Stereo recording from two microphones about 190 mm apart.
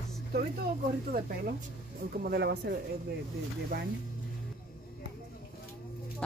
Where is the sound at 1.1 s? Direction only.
50° right (ahead or behind).